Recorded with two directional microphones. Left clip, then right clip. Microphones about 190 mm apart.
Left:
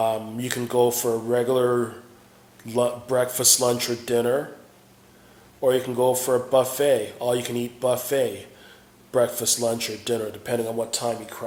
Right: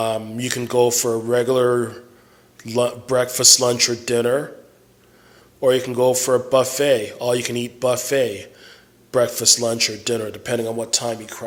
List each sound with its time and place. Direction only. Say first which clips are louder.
0.0 s a man's voice: right 2 dB; 40° right (ahead or behind)
5.5 s a man's voice: right 4 dB; 40° right (ahead or behind)